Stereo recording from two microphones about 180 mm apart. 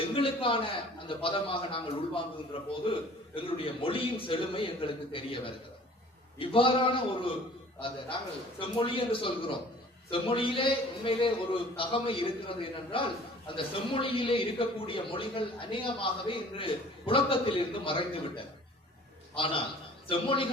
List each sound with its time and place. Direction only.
0.1 s a man's voice: 30° left (ahead or behind)
8.5 s a man's voice: 30° left (ahead or behind)